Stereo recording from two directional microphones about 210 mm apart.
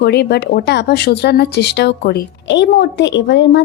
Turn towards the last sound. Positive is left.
turn(degrees=60)  # may be behind; listen again after turning